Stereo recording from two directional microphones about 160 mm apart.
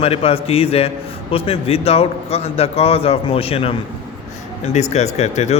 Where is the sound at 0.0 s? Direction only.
35° left (ahead or behind).